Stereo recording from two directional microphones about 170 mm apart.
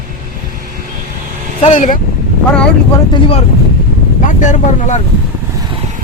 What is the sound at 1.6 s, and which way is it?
Speech, 45° left (ahead or behind).